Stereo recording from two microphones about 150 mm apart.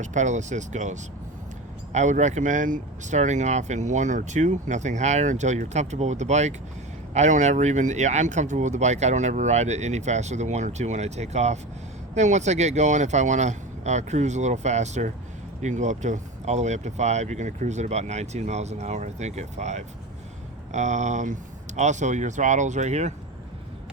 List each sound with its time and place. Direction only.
0.0 s speech: 55° right (ahead or behind)